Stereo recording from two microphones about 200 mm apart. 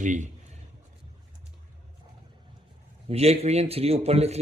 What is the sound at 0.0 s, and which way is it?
Speech, 40° right (ahead or behind).